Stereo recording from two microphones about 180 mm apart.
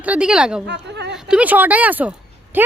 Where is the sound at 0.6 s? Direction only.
70° right (ahead or behind).